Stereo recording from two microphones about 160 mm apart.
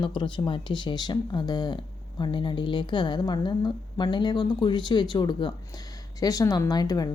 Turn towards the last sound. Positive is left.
turn(degrees=25)  # may be behind; listen again after turning